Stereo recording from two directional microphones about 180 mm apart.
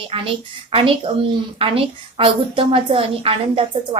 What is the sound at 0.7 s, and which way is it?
A woman's voice, 30° right (ahead or behind).